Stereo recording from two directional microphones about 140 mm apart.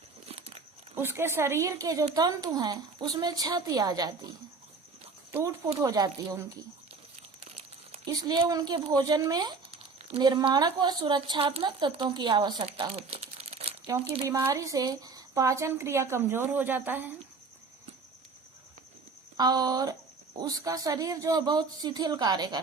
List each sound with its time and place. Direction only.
0.3 s biting: 45° right (ahead or behind)
0.9 s speech: 15° right (ahead or behind)
5.3 s speech: 20° right (ahead or behind)
8.0 s a woman's voice: 30° right (ahead or behind)
12.6 s crumpling: 45° right (ahead or behind)
13.8 s speech: 25° right (ahead or behind)
19.4 s speech: 30° right (ahead or behind)